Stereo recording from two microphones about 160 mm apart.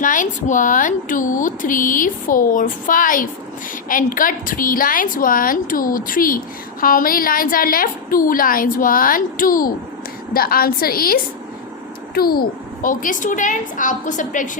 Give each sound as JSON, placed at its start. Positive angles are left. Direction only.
{"t": 0.0, "sound": "a woman's voice", "side_deg": 55}